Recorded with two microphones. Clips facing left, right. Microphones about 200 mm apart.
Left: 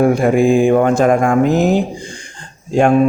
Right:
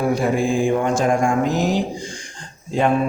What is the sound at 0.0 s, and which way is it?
A man's voice, 55° left (ahead or behind).